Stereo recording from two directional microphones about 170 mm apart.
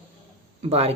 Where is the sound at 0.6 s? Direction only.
35° right (ahead or behind).